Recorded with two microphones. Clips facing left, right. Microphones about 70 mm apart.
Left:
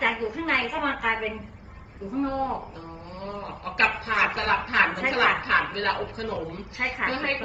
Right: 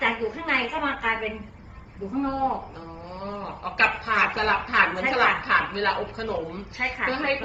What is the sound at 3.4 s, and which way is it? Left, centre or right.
A woman's voice, right.